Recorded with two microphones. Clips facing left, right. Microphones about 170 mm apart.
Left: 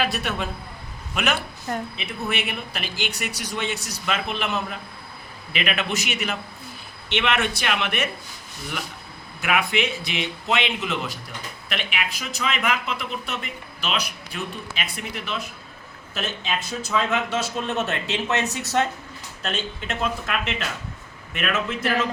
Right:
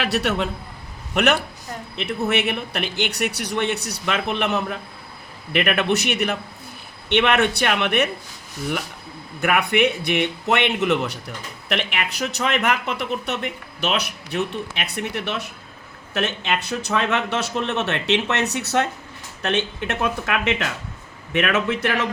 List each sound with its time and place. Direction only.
0.0 s a man's voice: 70° right (ahead or behind)
9.4 s a man's voice: 55° right (ahead or behind)